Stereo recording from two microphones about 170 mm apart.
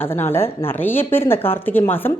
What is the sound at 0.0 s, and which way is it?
A woman's voice, 15° left (ahead or behind).